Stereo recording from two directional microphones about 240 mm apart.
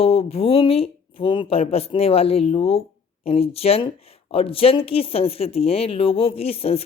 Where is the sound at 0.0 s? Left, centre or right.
Left.